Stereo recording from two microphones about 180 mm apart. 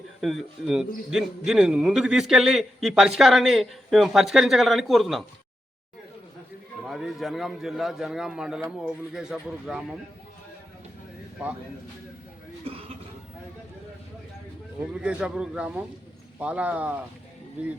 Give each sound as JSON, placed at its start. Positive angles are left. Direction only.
{"t": 0.2, "sound": "a man's voice", "side_deg": 0}
{"t": 6.8, "sound": "a man's voice", "side_deg": 0}
{"t": 12.7, "sound": "speech", "side_deg": -30}
{"t": 15.0, "sound": "a man's voice", "side_deg": -5}